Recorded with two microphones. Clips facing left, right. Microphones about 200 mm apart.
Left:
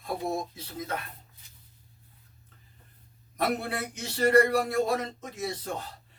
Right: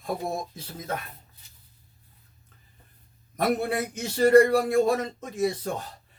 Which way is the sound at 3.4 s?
50° right (ahead or behind).